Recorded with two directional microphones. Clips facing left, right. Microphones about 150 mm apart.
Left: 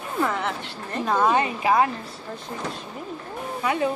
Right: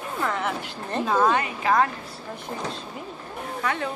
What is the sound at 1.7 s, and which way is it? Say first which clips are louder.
Speech: left 1 dB; 10° left (ahead or behind).